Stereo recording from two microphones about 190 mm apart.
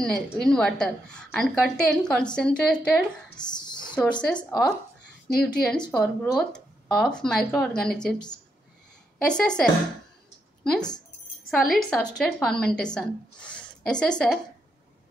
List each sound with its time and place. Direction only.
0.0 s speech: 5° left (ahead or behind)
3.3 s a woman's voice: 20° left (ahead or behind)
5.4 s speech: 5° left (ahead or behind)
9.2 s speech: 5° left (ahead or behind)